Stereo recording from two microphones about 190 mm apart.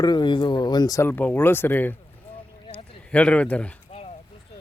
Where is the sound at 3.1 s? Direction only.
5° left (ahead or behind).